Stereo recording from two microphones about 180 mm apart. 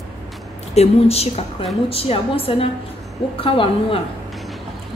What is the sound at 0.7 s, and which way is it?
A woman's voice, 35° left (ahead or behind).